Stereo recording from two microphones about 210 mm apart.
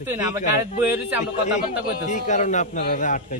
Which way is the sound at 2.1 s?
35° left (ahead or behind).